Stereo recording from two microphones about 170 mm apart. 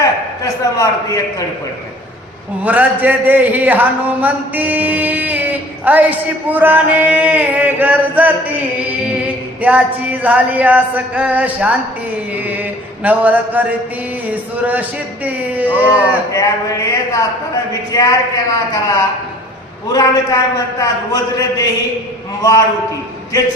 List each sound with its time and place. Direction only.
0.0 s a man's voice: 20° left (ahead or behind)
2.6 s speech: 10° right (ahead or behind)
12.3 s mantra: 10° right (ahead or behind)
14.3 s speech: 10° right (ahead or behind)
16.3 s a man's voice: 20° left (ahead or behind)